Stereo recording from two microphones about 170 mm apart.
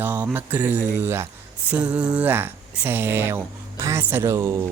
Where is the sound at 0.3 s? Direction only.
10° right (ahead or behind).